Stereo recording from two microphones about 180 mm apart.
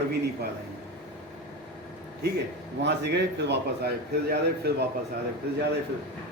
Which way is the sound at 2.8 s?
70° right (ahead or behind).